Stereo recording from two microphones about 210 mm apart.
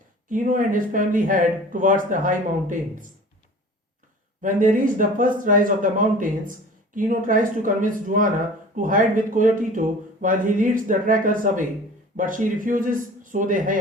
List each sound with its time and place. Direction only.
0.3 s speech: 40° right (ahead or behind)
4.4 s speech: 40° right (ahead or behind)